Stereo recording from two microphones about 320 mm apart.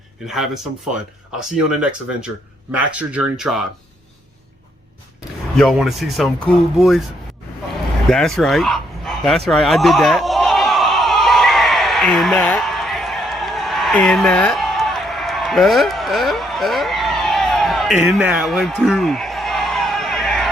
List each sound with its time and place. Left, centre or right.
0.3 s speech: centre
5.5 s speech: centre
8.1 s speech: centre
9.5 s snicker: centre